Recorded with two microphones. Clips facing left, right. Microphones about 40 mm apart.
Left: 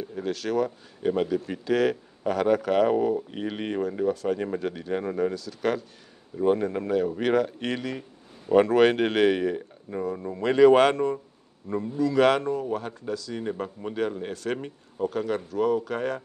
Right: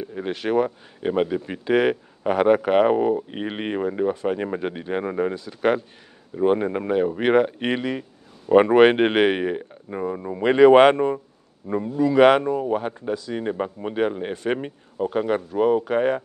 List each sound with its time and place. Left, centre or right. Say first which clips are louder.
0.0 s speech: right 3 dB; right